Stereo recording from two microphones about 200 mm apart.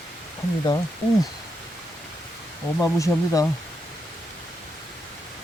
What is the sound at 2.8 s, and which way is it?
Speech, 15° left (ahead or behind).